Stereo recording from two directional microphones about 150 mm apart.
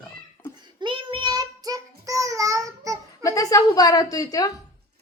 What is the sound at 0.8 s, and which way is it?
Child singing, 35° right (ahead or behind).